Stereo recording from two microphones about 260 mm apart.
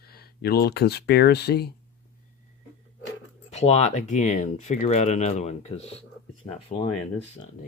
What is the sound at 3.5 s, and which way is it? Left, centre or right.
Speech, left.